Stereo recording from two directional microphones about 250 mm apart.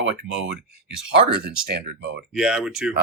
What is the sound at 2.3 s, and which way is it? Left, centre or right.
Speech, centre.